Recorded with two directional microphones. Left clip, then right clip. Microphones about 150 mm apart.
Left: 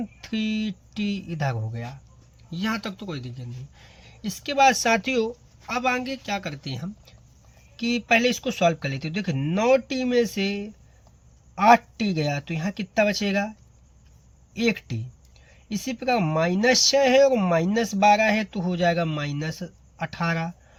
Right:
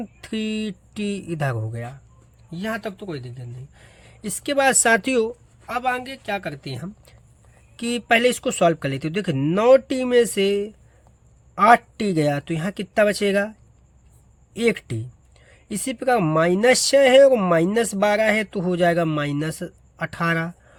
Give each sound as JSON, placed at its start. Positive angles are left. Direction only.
{"t": 0.2, "sound": "speech", "side_deg": -50}
{"t": 2.5, "sound": "speech", "side_deg": -15}
{"t": 5.6, "sound": "a woman's voice", "side_deg": -25}
{"t": 7.8, "sound": "speech", "side_deg": -50}
{"t": 14.5, "sound": "speech", "side_deg": -55}